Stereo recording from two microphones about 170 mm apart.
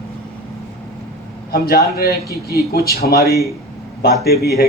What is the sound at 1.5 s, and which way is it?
Speech, 65° left (ahead or behind).